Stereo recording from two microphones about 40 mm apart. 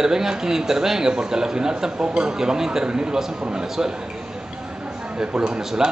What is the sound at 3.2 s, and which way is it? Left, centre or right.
Speech, centre.